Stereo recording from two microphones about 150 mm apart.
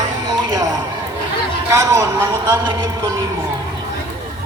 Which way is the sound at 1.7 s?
20° right (ahead or behind).